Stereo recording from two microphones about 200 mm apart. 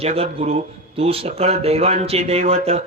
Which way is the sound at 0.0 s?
30° right (ahead or behind).